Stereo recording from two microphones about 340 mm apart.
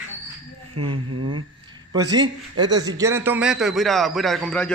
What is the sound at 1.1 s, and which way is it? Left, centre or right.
Speech, right.